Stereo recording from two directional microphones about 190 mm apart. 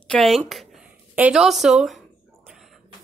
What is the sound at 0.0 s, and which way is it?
A woman's voice, 5° left (ahead or behind).